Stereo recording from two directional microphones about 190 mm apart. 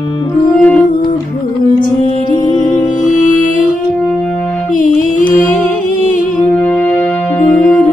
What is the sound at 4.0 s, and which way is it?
Music, 5° left (ahead or behind).